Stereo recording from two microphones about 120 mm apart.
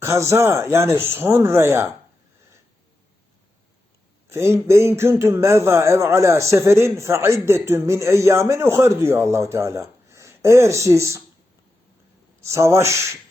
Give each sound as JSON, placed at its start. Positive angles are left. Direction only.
{"t": 0.0, "sound": "a man's voice", "side_deg": -25}
{"t": 4.3, "sound": "a man's voice", "side_deg": -20}
{"t": 12.4, "sound": "a man's voice", "side_deg": -25}